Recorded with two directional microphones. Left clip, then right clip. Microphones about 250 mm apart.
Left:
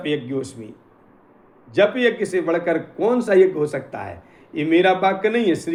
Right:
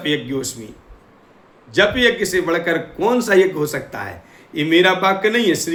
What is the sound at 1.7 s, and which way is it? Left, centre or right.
A man's voice, centre.